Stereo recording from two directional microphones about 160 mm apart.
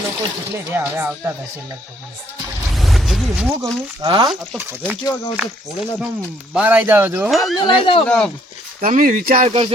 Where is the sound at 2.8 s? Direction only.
Centre (ahead or behind).